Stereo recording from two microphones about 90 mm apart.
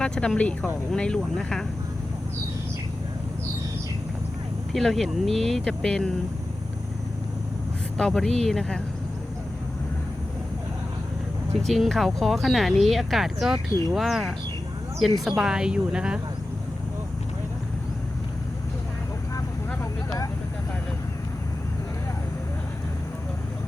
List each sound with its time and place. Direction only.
0.0 s speech: 10° left (ahead or behind)
4.7 s speech: 5° left (ahead or behind)
7.9 s speech: 5° left (ahead or behind)
11.6 s speech: centre (ahead or behind)
19.8 s vehicle: 35° left (ahead or behind)